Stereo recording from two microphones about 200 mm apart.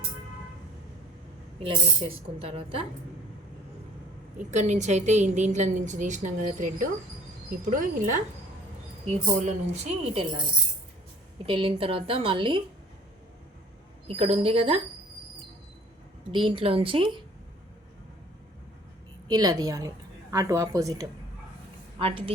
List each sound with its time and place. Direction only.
1.5 s a woman's voice: 30° right (ahead or behind)
4.5 s a woman's voice: 35° right (ahead or behind)
11.4 s a woman's voice: 25° right (ahead or behind)
14.1 s a woman's voice: 30° right (ahead or behind)
16.3 s a woman's voice: 25° right (ahead or behind)
19.3 s speech: 20° right (ahead or behind)
21.9 s a woman's voice: 25° right (ahead or behind)